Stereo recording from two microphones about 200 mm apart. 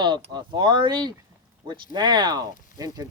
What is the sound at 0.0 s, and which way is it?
Speech, 20° right (ahead or behind).